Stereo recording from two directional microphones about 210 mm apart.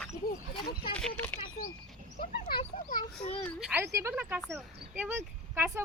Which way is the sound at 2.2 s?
45° left (ahead or behind).